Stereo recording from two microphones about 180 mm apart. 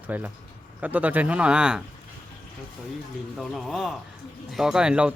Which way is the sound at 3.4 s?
Centre (ahead or behind).